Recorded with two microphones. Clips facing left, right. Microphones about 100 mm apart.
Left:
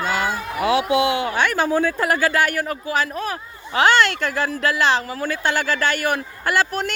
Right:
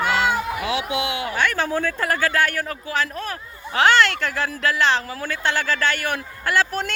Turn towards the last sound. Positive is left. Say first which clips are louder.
# left 1 dB
turn(degrees=10)  # may be behind; listen again after turning